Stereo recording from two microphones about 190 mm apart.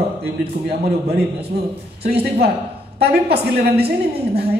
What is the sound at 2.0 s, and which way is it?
A man's voice, 55° right (ahead or behind).